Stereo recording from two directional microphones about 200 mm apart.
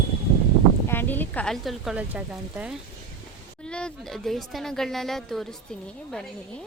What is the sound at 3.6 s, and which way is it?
Speech, 5° left (ahead or behind).